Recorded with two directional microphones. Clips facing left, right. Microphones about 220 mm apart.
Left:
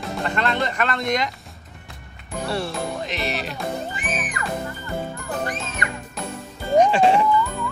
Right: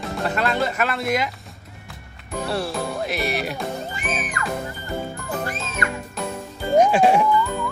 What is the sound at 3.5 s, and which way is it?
Music, centre (ahead or behind).